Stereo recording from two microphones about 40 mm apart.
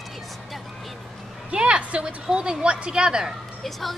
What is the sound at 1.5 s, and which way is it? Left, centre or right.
Speech, right.